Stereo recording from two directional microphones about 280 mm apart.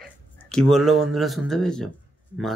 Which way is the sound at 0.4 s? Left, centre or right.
Centre.